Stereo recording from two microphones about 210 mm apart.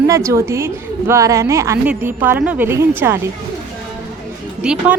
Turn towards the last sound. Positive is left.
turn(degrees=-5)  # may be behind; listen again after turning